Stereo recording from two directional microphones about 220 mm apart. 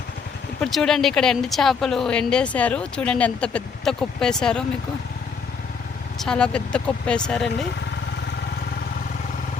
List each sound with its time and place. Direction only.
0.6 s speech: centre (ahead or behind)
6.1 s speech: 5° left (ahead or behind)